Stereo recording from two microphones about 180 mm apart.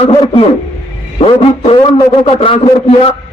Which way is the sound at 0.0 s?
30° left (ahead or behind).